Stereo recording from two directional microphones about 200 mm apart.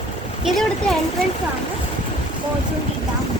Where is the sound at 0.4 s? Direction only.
Centre (ahead or behind).